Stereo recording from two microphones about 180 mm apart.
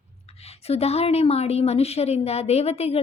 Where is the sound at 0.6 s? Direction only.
35° left (ahead or behind).